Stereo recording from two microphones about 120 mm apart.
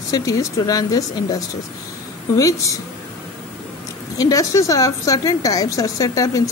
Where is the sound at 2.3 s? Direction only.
30° left (ahead or behind).